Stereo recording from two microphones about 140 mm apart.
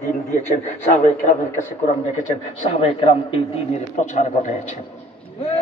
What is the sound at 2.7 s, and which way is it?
Speech, 45° left (ahead or behind).